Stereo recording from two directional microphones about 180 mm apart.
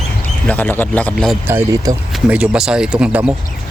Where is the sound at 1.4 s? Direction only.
15° right (ahead or behind).